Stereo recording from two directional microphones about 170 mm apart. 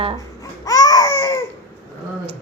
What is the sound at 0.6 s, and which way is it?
Baby cry, 20° left (ahead or behind).